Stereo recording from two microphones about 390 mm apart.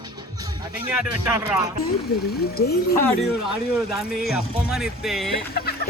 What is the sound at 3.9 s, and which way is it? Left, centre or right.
Speech, centre.